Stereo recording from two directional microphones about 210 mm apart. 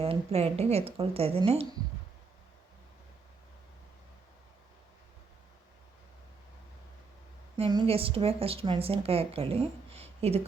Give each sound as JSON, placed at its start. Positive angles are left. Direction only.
{"t": 0.0, "sound": "speech", "side_deg": -30}
{"t": 7.5, "sound": "speech", "side_deg": -20}